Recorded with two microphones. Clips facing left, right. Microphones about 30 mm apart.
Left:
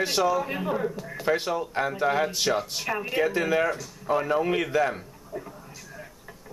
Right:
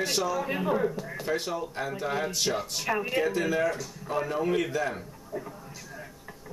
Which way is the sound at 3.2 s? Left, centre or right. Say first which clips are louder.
Left 6 dB; centre.